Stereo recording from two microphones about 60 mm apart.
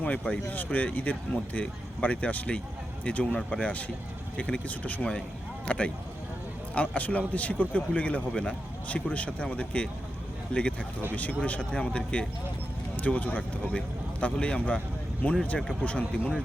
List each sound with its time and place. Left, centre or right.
0.0 s a man's voice: left
4.7 s a man's voice: left
11.1 s a man's voice: left
13.0 s a man's voice: left
15.2 s a man's voice: left